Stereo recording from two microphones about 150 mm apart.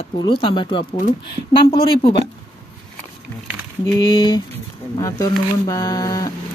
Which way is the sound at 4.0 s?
30° left (ahead or behind).